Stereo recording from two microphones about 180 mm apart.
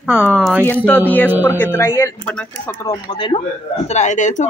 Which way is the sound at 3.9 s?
40° left (ahead or behind).